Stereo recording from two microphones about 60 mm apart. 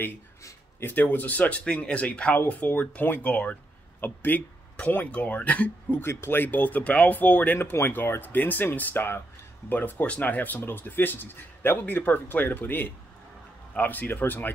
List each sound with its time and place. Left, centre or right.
0.4 s a sound: left
0.8 s speech: left
1.6 s speech: centre
5.9 s speech: left
7.5 s speech: left